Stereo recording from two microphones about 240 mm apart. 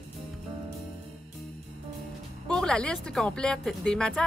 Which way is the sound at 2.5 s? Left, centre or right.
Centre.